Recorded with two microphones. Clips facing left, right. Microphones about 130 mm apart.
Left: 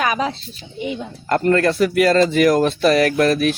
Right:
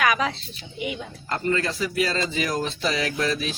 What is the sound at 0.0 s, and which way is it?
Speech, 30° left (ahead or behind).